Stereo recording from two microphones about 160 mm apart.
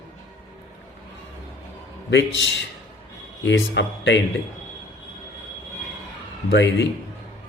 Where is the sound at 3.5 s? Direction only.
90° left.